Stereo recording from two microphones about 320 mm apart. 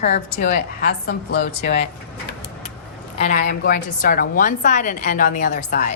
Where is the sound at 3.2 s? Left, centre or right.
Left.